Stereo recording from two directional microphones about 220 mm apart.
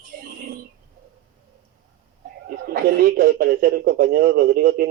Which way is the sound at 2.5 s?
40° right (ahead or behind).